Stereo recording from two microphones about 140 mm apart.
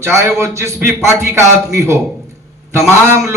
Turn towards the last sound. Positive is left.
turn(degrees=-20)  # may be behind; listen again after turning